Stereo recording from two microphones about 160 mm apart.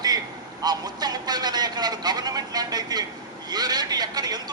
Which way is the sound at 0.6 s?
25° right (ahead or behind).